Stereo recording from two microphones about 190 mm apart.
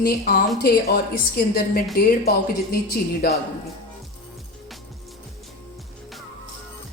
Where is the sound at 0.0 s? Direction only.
55° left (ahead or behind).